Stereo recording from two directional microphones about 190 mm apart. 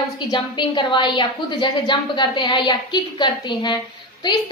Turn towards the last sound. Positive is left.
turn(degrees=25)  # may be behind; listen again after turning